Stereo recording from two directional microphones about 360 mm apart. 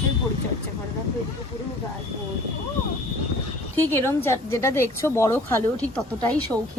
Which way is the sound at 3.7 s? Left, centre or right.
Centre.